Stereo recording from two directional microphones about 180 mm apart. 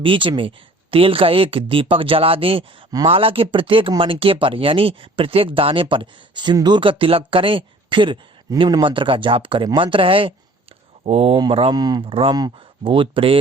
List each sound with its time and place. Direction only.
0.0 s speech: 30° right (ahead or behind)